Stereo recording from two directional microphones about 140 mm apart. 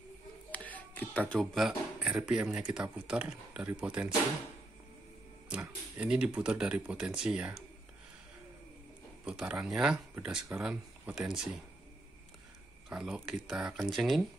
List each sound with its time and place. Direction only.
0.5 s a sound: 10° left (ahead or behind)
1.3 s speech: centre (ahead or behind)
5.5 s speech: 10° right (ahead or behind)
9.2 s speech: 10° right (ahead or behind)
12.9 s speech: 5° right (ahead or behind)